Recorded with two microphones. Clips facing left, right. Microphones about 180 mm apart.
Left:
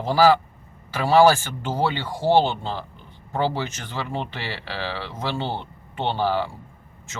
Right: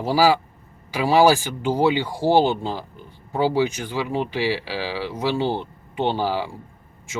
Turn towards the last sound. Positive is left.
turn(degrees=-10)  # may be behind; listen again after turning